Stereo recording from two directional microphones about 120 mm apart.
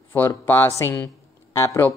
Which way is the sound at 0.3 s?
20° left (ahead or behind).